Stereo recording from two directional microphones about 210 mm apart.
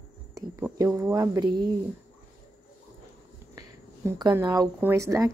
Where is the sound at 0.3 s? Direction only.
15° right (ahead or behind).